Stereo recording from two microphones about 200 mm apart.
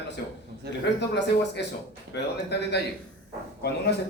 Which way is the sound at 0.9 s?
60° left (ahead or behind).